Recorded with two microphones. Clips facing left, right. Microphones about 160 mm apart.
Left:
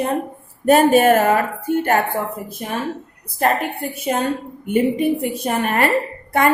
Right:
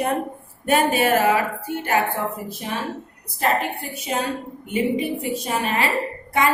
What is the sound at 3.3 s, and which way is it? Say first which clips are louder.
A woman's voice: left 3 dB; 55° left (ahead or behind).